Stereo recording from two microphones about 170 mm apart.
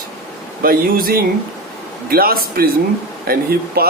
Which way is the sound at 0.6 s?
60° right (ahead or behind).